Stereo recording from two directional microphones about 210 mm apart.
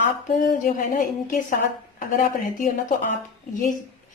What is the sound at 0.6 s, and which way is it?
Speech, 40° left (ahead or behind).